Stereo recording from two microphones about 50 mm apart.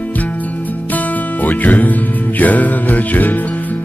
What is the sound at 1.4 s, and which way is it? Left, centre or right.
Music, left.